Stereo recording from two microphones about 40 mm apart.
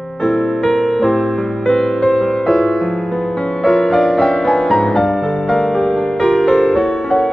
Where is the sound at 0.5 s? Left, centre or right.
Centre.